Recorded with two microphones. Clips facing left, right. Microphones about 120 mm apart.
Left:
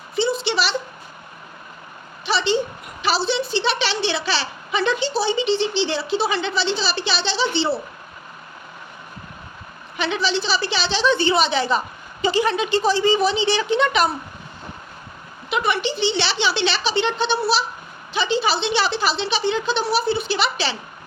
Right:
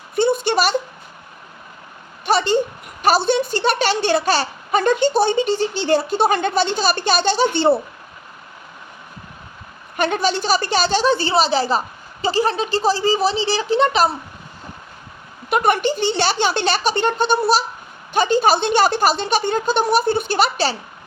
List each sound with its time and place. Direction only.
0.2 s a sound: 50° right (ahead or behind)
2.2 s a child's voice: 45° right (ahead or behind)
10.0 s a child's voice: 50° right (ahead or behind)
15.4 s a child's voice: 50° right (ahead or behind)